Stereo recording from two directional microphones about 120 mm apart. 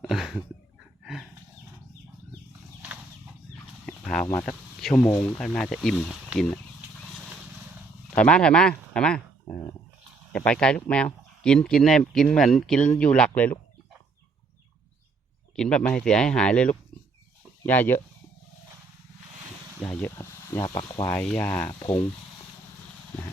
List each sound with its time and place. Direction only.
0.1 s speech: centre (ahead or behind)
1.0 s wild animals: centre (ahead or behind)
3.8 s chicken: 10° left (ahead or behind)
4.4 s speech: 5° left (ahead or behind)
8.1 s speech: 10° left (ahead or behind)
15.5 s speech: 5° left (ahead or behind)
19.8 s speech: 15° left (ahead or behind)
21.2 s speech: 15° left (ahead or behind)